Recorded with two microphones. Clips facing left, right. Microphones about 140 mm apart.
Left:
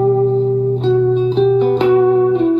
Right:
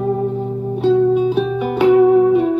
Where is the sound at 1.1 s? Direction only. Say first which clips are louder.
Left 4 dB; 10° right (ahead or behind).